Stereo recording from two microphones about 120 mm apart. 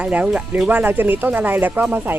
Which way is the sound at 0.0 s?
10° right (ahead or behind).